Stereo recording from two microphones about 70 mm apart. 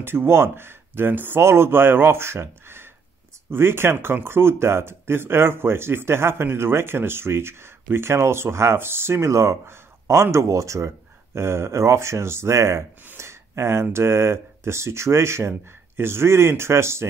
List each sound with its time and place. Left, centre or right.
0.0 s speech: right